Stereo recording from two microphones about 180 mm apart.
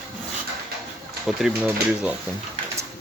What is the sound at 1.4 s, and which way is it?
Speech, 5° right (ahead or behind).